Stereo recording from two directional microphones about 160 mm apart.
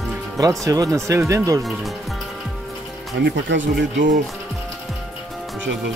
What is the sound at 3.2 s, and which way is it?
Speech, 90° right.